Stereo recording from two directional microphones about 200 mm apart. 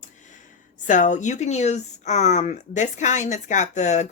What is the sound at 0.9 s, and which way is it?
Speech, 40° left (ahead or behind).